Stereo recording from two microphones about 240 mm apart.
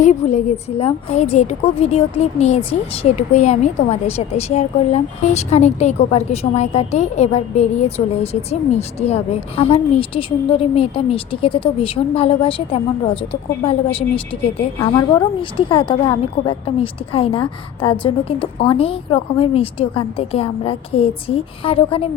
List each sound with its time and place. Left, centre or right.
0.0 s a woman's voice: left